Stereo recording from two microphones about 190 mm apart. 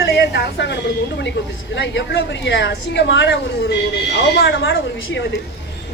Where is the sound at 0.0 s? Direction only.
65° left (ahead or behind).